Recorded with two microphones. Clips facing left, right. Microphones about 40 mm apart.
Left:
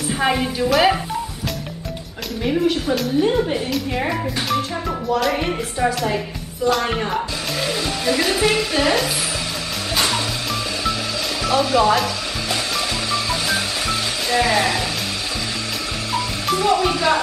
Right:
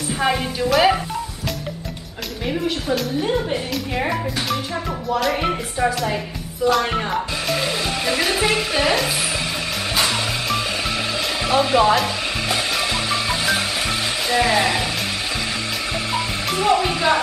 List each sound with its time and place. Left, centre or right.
0.1 s a woman's voice: centre
2.4 s a woman's voice: centre
11.4 s speech: right
12.4 s music: right
14.3 s speech: centre
16.5 s speech: right